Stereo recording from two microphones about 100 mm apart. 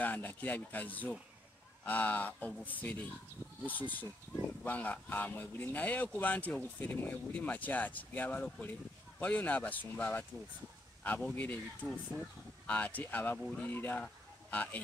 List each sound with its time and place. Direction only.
0.0 s speech: 20° left (ahead or behind)
11.3 s speech: 15° left (ahead or behind)
14.0 s a sound: 15° left (ahead or behind)